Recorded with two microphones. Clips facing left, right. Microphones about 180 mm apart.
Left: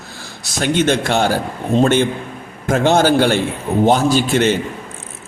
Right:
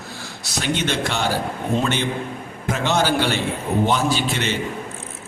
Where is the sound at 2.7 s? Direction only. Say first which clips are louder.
Left 7 dB; 50° left (ahead or behind).